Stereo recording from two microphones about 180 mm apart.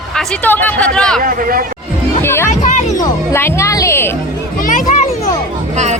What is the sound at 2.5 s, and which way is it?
Speech, 45° left (ahead or behind).